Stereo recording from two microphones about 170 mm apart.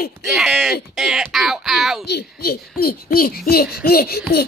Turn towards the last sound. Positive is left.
turn(degrees=65)  # may be behind; listen again after turning